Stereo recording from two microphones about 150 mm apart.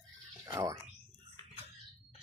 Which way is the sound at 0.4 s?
25° right (ahead or behind).